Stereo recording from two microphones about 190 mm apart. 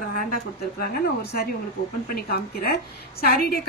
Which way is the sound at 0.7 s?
55° left (ahead or behind).